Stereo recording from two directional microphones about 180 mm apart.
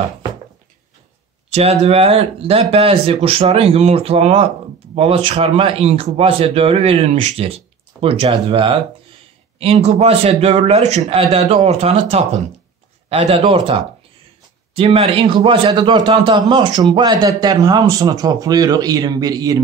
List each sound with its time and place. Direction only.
1.5 s a man's voice: 35° right (ahead or behind)